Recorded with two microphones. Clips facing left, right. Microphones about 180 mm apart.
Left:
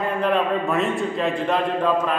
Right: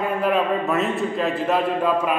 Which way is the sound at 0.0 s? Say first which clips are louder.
Even; 5° right (ahead or behind).